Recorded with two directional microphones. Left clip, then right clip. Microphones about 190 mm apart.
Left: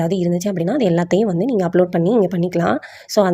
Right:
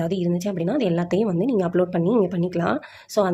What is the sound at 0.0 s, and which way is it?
Speech, 20° left (ahead or behind).